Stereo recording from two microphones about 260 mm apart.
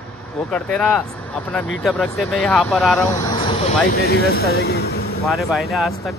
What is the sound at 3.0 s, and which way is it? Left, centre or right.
Speech, centre.